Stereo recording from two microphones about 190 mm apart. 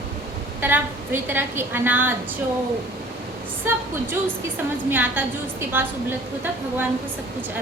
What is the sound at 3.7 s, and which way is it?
Speech, 15° right (ahead or behind).